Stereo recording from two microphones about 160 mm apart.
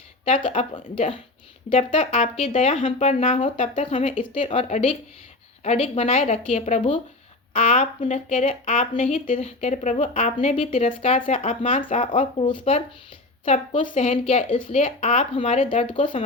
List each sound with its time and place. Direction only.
0.3 s a woman's voice: 35° left (ahead or behind)
7.6 s speech: 55° left (ahead or behind)
12.4 s a woman's voice: 35° left (ahead or behind)
13.8 s a woman's voice: 45° left (ahead or behind)